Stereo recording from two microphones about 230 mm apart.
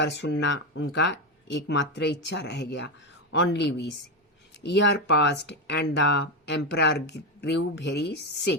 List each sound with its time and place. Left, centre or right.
0.0 s speech: left